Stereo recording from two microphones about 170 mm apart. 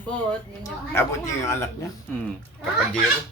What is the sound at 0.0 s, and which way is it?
A woman's voice, 10° left (ahead or behind).